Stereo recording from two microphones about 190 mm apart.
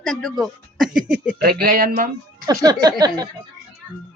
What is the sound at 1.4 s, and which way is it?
Speech, 55° right (ahead or behind).